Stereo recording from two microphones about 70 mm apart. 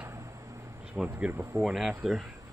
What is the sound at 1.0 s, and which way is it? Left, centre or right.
Speech, centre.